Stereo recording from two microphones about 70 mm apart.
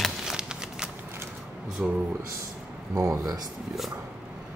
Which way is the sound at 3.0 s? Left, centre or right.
Right.